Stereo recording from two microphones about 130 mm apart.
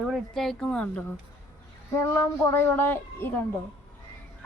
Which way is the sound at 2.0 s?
20° left (ahead or behind).